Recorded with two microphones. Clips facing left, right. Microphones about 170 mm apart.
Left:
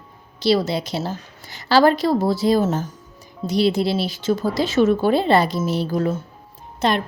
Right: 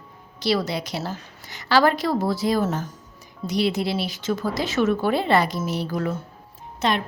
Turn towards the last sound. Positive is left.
turn(degrees=35)  # may be behind; listen again after turning